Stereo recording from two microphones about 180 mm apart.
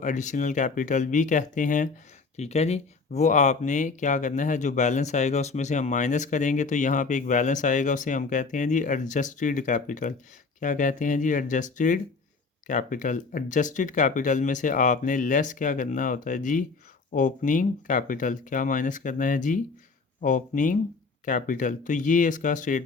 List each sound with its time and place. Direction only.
0.0 s speech: 40° left (ahead or behind)